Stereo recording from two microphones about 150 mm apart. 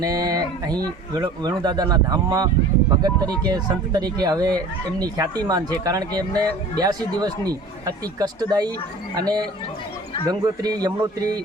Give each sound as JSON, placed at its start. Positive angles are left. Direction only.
{"t": 0.0, "sound": "speech", "side_deg": -25}